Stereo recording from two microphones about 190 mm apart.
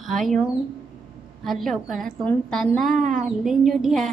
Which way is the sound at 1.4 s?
Centre (ahead or behind).